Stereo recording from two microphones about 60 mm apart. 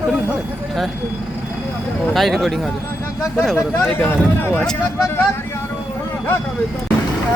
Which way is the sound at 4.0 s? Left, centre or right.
Left.